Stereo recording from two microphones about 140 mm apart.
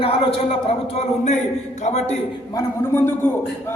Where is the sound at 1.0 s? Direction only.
55° left (ahead or behind).